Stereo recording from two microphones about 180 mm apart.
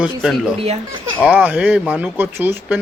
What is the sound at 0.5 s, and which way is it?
Speech, 35° right (ahead or behind).